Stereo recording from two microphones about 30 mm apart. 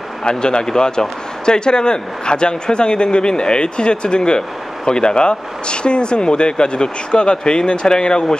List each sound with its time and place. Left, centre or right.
0.2 s speech: left